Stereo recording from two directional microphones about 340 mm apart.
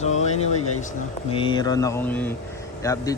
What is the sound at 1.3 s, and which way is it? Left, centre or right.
Speech, centre.